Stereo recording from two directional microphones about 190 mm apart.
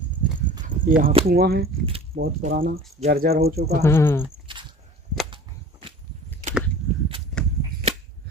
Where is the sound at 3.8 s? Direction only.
15° left (ahead or behind).